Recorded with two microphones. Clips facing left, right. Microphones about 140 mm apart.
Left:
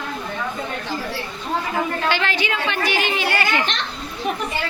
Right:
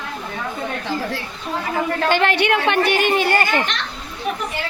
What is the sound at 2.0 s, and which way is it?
Speech, 50° right (ahead or behind).